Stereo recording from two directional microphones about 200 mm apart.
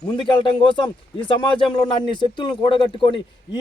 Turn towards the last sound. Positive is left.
turn(degrees=25)  # may be behind; listen again after turning